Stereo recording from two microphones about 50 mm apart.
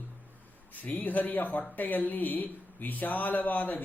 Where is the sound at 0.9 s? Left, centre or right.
Left.